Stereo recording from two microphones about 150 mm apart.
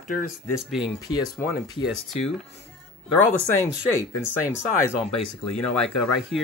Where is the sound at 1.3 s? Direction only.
Centre (ahead or behind).